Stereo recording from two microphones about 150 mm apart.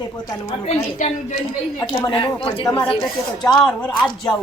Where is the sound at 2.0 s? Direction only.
35° left (ahead or behind).